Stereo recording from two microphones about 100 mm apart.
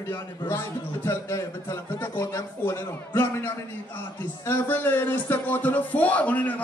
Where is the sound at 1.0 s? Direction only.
30° left (ahead or behind).